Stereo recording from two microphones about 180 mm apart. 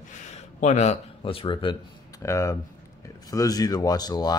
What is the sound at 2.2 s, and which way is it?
Speech, 15° left (ahead or behind).